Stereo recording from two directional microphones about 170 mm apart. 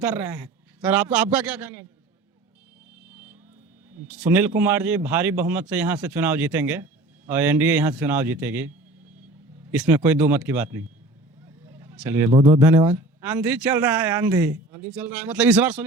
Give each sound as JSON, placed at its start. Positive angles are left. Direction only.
{"t": 0.0, "sound": "speech", "side_deg": -10}
{"t": 3.1, "sound": "vehicle", "side_deg": -10}
{"t": 4.1, "sound": "speech", "side_deg": -10}
{"t": 11.4, "sound": "a sound", "side_deg": -15}
{"t": 12.5, "sound": "speech", "side_deg": -15}